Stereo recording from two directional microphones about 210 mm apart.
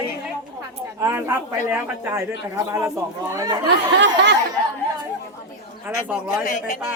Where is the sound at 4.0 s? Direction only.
60° right (ahead or behind).